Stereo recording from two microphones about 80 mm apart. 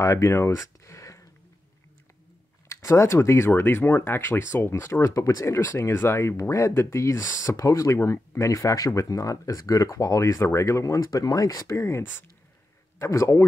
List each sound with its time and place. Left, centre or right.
0.0 s speech: left
2.7 s speech: left
5.1 s speech: left
13.0 s speech: left